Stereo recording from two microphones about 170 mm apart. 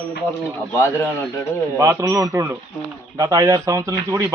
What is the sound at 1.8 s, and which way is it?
Speech, 15° right (ahead or behind).